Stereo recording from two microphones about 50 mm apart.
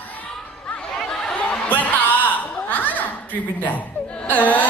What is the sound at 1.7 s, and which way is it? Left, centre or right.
Music, left.